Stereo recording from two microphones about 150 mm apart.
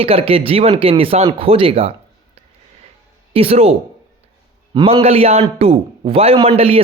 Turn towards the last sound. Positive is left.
turn(degrees=-40)  # may be behind; listen again after turning